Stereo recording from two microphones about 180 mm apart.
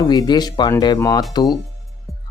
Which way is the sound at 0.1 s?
25° left (ahead or behind).